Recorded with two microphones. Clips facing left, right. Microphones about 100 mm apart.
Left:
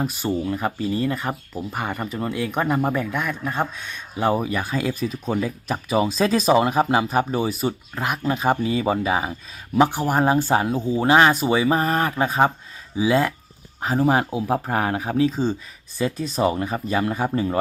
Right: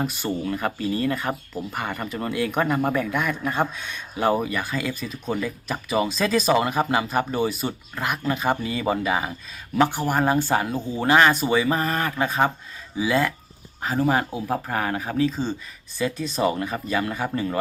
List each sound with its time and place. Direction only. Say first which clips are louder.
0.0 s speech: left 2 dB; 5° left (ahead or behind)